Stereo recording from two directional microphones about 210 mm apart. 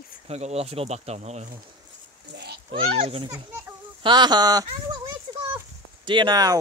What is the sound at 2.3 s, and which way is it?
Children playing, 55° right (ahead or behind).